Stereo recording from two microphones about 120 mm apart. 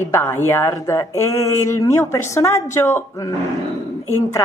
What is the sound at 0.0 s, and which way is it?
Speech, 20° left (ahead or behind).